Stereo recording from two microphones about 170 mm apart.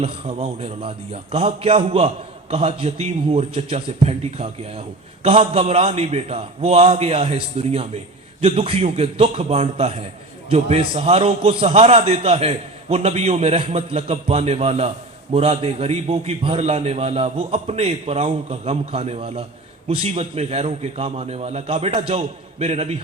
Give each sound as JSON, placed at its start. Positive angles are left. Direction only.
{"t": 0.0, "sound": "a man's voice", "side_deg": -35}